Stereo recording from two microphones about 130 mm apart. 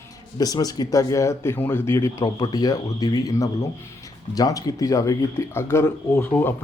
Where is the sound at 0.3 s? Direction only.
30° left (ahead or behind).